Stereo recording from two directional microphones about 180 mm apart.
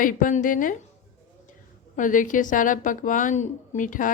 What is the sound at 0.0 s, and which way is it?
Speech, 50° left (ahead or behind).